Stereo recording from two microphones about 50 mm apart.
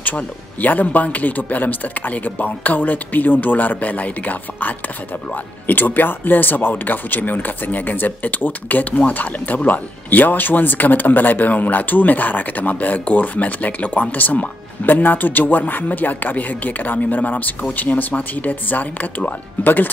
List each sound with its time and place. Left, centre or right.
0.0 s speech: left